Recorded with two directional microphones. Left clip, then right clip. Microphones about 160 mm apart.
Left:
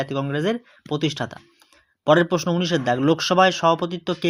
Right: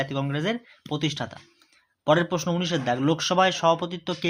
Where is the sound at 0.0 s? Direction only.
25° left (ahead or behind).